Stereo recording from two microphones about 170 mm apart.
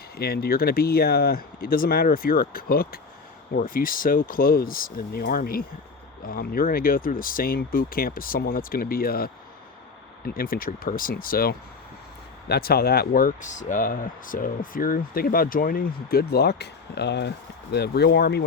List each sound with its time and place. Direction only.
0.2 s speech: 65° left (ahead or behind)